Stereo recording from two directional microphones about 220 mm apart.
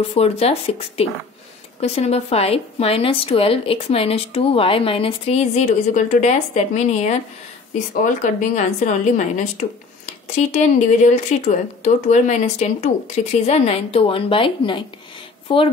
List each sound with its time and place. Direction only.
0.1 s a woman's voice: 30° left (ahead or behind)